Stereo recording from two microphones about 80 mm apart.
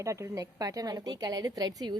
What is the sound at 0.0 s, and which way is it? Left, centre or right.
Speech, right.